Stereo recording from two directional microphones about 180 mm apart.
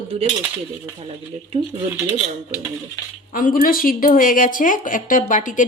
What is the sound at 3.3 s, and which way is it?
A woman's voice, 50° left (ahead or behind).